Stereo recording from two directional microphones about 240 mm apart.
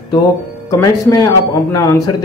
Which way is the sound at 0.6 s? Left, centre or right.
Centre.